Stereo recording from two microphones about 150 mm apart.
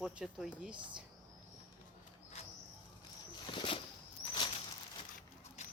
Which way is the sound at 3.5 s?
35° left (ahead or behind).